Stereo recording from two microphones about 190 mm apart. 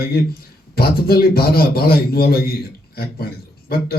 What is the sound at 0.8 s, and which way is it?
A man's voice, 55° left (ahead or behind).